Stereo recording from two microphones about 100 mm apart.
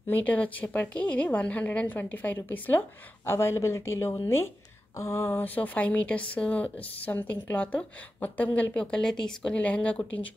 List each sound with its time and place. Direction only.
0.1 s speech: 15° left (ahead or behind)